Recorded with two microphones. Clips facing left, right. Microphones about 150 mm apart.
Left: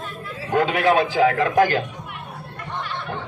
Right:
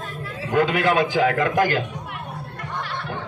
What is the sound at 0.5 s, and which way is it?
A man's voice, 40° left (ahead or behind).